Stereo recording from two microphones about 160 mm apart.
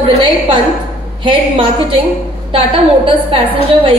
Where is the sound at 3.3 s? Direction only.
35° right (ahead or behind).